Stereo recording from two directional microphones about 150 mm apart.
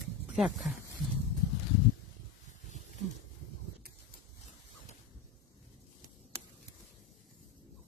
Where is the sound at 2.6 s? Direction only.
55° left (ahead or behind).